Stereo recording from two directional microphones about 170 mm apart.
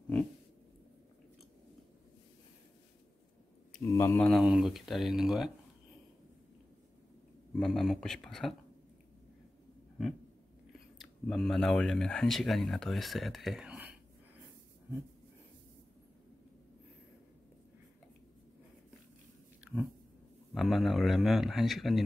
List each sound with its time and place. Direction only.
3.9 s speech: 15° left (ahead or behind)
4.2 s a man's voice: centre (ahead or behind)
7.5 s a man's voice: centre (ahead or behind)
10.7 s speech: centre (ahead or behind)
19.6 s a sound: 10° right (ahead or behind)
20.5 s a man's voice: centre (ahead or behind)